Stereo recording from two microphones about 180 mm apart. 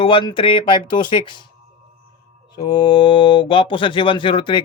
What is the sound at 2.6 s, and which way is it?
A man's voice, 25° left (ahead or behind).